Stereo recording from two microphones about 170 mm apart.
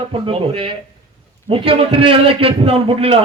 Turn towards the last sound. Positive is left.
turn(degrees=-35)  # may be behind; listen again after turning